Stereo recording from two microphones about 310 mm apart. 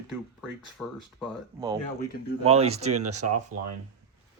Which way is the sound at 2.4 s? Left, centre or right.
Centre.